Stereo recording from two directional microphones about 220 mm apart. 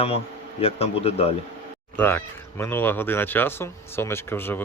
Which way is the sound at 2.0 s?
10° left (ahead or behind).